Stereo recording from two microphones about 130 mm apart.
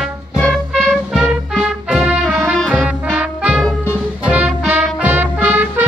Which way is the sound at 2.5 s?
5° left (ahead or behind).